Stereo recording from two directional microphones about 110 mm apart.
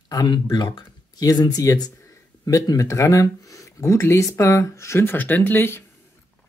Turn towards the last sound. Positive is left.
turn(degrees=20)  # may be behind; listen again after turning